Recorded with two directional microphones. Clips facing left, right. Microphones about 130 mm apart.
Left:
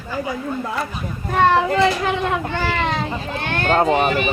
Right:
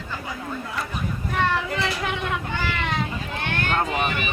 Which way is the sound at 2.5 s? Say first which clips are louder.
Left 5 dB; 40° left (ahead or behind).